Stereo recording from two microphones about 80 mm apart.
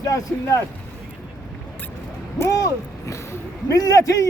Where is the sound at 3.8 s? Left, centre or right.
Left.